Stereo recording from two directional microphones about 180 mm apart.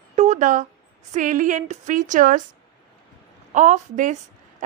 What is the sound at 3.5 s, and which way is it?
Speech, 45° right (ahead or behind).